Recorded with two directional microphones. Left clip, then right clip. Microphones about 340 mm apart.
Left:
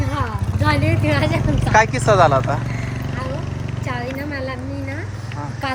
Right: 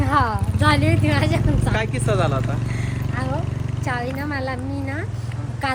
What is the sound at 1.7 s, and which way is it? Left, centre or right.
Speech, centre.